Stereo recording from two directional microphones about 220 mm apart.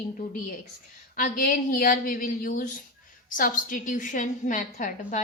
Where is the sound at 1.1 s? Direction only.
40° left (ahead or behind).